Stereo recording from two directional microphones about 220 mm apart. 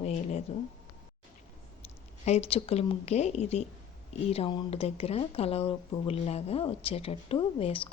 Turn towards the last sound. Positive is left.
turn(degrees=25)  # may be behind; listen again after turning